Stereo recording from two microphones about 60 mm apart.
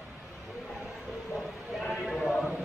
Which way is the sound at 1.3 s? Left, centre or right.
Centre.